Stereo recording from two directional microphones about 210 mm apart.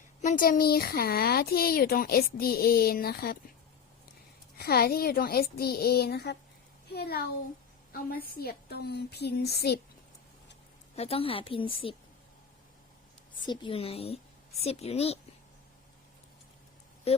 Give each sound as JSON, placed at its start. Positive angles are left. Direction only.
{"t": 0.2, "sound": "speech", "side_deg": 40}
{"t": 4.5, "sound": "speech", "side_deg": 45}
{"t": 10.9, "sound": "a woman's voice", "side_deg": 30}
{"t": 13.4, "sound": "a woman's voice", "side_deg": 20}
{"t": 17.1, "sound": "speech", "side_deg": 30}